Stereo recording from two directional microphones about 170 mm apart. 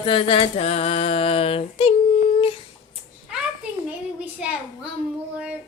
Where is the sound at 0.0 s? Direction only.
30° left (ahead or behind).